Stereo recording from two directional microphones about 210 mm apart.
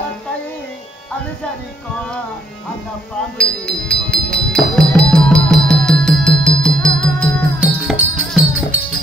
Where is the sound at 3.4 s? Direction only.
5° left (ahead or behind).